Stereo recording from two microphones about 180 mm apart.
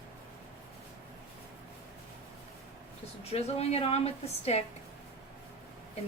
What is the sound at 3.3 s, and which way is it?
A woman's voice, 35° left (ahead or behind).